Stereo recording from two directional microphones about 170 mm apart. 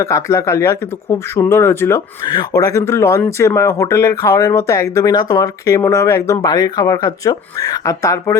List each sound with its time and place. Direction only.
0.0 s speech: 20° left (ahead or behind)